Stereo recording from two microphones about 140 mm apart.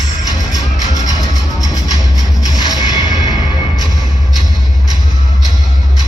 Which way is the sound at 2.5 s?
30° left (ahead or behind).